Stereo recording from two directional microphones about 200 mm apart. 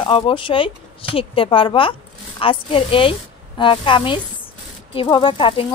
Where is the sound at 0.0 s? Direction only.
25° left (ahead or behind).